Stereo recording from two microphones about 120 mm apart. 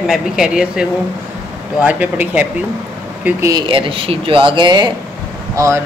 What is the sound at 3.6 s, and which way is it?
Speech, 50° right (ahead or behind).